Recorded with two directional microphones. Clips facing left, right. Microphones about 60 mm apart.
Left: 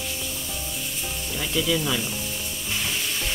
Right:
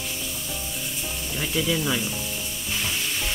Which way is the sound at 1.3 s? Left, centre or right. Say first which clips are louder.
Left 1 dB; centre.